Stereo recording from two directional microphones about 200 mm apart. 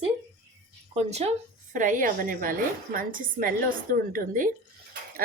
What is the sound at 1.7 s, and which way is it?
A woman's voice, 40° right (ahead or behind).